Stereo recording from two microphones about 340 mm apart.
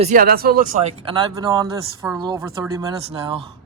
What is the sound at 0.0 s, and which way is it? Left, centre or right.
Speech, right.